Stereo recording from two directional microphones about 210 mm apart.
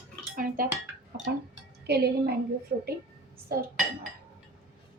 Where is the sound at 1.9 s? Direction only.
50° right (ahead or behind).